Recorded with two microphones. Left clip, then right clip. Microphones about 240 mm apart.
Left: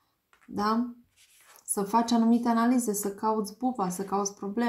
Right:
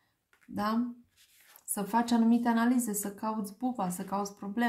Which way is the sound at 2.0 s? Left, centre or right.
Right.